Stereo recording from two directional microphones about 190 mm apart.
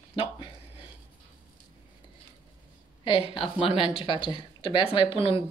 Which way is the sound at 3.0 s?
25° left (ahead or behind).